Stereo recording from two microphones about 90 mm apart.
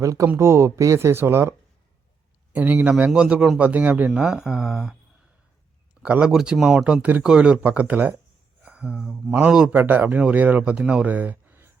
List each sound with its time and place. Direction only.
0.0 s speech: 35° right (ahead or behind)
2.6 s speech: 15° right (ahead or behind)
4.1 s speech: 5° right (ahead or behind)
8.6 s a sound: 10° right (ahead or behind)
9.3 s speech: 15° right (ahead or behind)